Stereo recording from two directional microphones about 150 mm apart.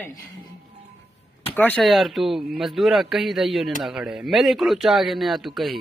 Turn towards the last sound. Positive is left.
turn(degrees=0)  # may be behind; listen again after turning